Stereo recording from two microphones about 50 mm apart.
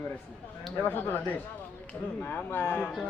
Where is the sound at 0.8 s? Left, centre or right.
Left.